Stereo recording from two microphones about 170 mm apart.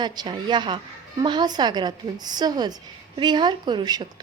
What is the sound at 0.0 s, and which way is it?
A woman's voice, 25° right (ahead or behind).